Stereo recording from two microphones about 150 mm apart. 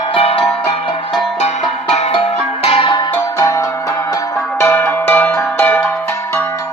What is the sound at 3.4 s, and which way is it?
Music, 20° left (ahead or behind).